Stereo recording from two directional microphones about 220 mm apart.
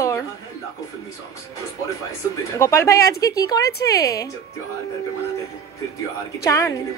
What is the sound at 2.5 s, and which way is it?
Speech, 15° left (ahead or behind).